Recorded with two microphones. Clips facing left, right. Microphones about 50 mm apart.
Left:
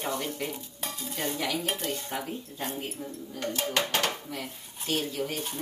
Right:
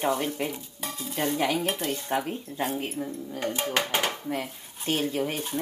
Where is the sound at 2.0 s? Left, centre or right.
Right.